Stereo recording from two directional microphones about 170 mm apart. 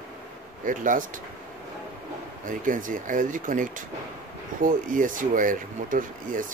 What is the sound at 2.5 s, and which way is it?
Speech, 50° right (ahead or behind).